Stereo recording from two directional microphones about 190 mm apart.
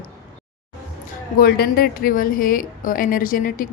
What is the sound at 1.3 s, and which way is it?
A woman's voice, 50° left (ahead or behind).